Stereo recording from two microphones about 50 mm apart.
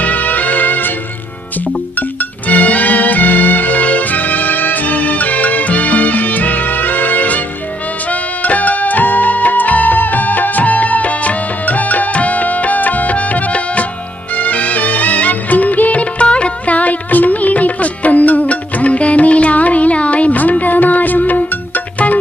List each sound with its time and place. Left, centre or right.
0.0 s music: left
2.5 s music: left
14.3 s music of bollywood: left
21.9 s music: left